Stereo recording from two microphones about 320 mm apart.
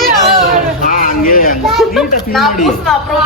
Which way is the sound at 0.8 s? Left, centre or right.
Left.